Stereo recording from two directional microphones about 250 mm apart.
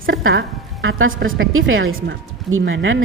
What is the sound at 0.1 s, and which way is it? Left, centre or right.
A woman's voice, right.